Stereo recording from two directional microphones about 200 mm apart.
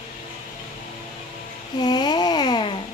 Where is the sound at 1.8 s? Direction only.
20° left (ahead or behind).